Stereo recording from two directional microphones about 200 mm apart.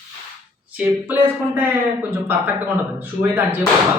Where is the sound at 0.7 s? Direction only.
10° right (ahead or behind).